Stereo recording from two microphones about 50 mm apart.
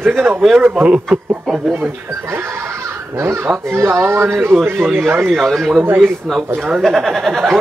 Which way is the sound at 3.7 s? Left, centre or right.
Right.